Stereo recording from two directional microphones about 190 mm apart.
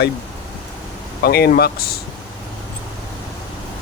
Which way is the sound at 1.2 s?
55° left (ahead or behind).